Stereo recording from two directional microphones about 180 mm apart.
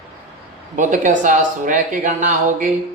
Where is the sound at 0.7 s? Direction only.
45° right (ahead or behind).